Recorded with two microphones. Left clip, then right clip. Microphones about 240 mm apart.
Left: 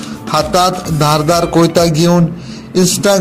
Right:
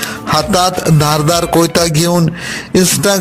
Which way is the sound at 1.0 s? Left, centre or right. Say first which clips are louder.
Left 3 dB; right.